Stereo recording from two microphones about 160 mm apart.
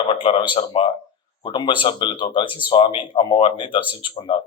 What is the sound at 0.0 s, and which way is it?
A man's voice, 35° left (ahead or behind).